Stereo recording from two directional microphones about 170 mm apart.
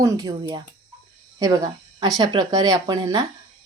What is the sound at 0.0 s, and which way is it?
Speech, 20° right (ahead or behind).